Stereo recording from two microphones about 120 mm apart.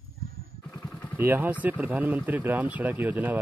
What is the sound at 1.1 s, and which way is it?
Speech, 15° right (ahead or behind).